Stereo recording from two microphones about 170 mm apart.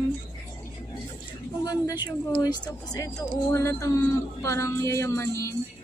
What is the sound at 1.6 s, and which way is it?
Speech, 25° left (ahead or behind).